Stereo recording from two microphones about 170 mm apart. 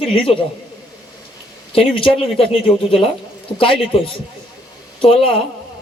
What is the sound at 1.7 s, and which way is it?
A man's voice, 30° left (ahead or behind).